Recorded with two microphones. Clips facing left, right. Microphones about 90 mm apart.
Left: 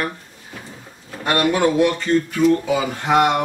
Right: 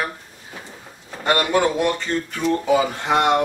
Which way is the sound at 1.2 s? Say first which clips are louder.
Left 1 dB; centre (ahead or behind).